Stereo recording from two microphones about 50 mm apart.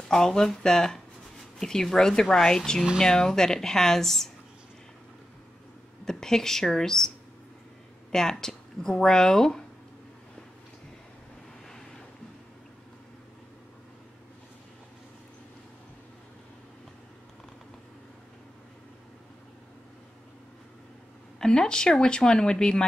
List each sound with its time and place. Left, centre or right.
0.1 s speech: centre
6.0 s speech: centre
8.1 s speech: centre
21.4 s speech: centre